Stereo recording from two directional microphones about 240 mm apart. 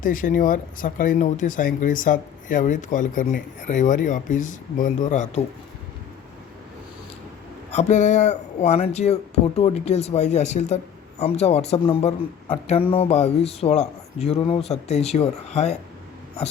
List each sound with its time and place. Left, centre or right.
0.0 s speech: left
7.7 s speech: left